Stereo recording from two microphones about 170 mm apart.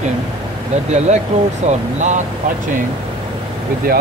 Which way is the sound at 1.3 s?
40° right (ahead or behind).